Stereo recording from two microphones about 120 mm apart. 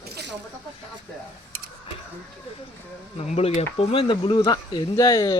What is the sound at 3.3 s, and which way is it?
Speech, 60° left (ahead or behind).